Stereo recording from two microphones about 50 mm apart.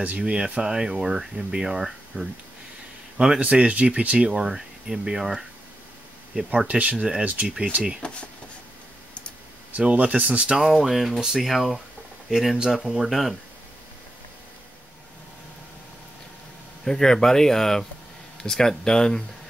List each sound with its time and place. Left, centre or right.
0.2 s speech: centre
3.3 s speech: right
4.5 s speech: centre
6.4 s speech: right
8.0 s speech: left
9.7 s speech: right
10.5 s speech: centre
16.8 s speech: centre